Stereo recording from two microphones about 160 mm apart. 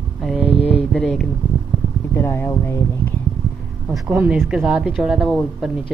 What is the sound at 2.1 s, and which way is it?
Speech, 15° left (ahead or behind).